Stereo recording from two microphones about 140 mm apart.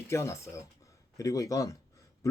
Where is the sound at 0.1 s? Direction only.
20° left (ahead or behind).